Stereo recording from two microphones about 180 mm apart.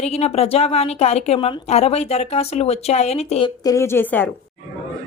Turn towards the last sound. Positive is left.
turn(degrees=10)  # may be behind; listen again after turning